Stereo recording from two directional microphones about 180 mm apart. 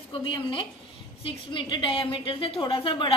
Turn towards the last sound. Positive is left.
turn(degrees=30)  # may be behind; listen again after turning